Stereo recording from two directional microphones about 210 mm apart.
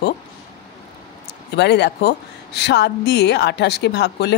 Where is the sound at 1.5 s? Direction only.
50° left (ahead or behind).